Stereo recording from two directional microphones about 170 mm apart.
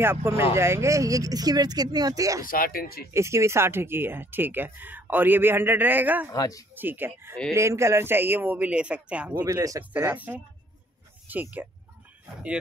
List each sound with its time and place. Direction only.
0.0 s speech: 15° right (ahead or behind)
2.4 s speech: 55° left (ahead or behind)
3.1 s speech: 15° right (ahead or behind)
6.3 s speech: 20° left (ahead or behind)
6.7 s speech: 10° right (ahead or behind)